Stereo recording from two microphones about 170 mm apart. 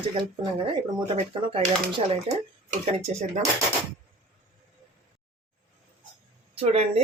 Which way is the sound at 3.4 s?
45° right (ahead or behind).